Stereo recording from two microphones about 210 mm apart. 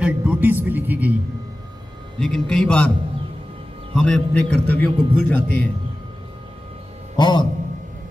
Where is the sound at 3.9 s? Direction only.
5° left (ahead or behind).